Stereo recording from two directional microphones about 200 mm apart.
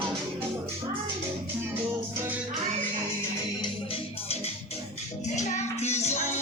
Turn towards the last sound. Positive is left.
turn(degrees=35)  # may be behind; listen again after turning